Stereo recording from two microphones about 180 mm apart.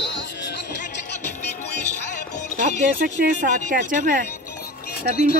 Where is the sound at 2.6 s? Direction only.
50° right (ahead or behind).